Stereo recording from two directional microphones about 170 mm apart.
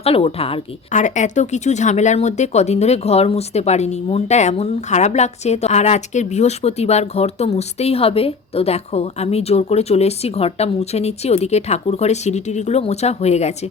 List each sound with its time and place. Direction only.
0.0 s a woman's voice: 35° left (ahead or behind)